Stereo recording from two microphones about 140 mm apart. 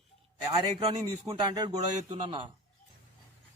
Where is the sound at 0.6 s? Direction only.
40° right (ahead or behind).